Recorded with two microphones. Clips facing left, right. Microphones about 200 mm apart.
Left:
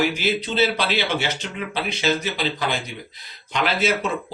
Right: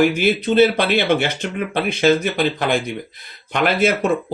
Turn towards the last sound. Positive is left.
turn(degrees=-55)  # may be behind; listen again after turning